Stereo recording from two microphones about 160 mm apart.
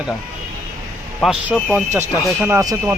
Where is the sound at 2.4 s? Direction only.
15° right (ahead or behind).